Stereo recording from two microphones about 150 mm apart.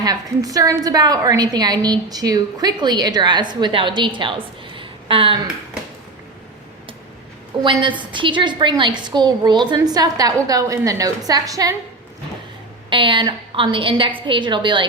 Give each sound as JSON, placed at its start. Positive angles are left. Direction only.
{"t": 0.0, "sound": "a woman's voice", "side_deg": -25}
{"t": 7.6, "sound": "a woman's voice", "side_deg": -30}
{"t": 12.9, "sound": "a woman's voice", "side_deg": -35}